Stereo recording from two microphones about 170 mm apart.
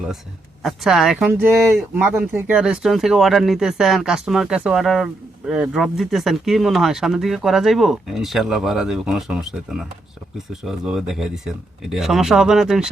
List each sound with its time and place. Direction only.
0.6 s speech: centre (ahead or behind)